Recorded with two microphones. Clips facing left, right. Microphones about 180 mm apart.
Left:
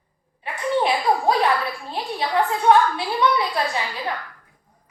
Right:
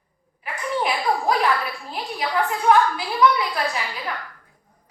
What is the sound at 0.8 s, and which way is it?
A woman's voice, 25° left (ahead or behind).